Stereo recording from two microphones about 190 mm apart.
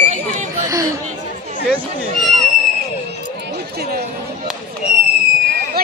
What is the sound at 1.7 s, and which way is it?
Speech, centre (ahead or behind).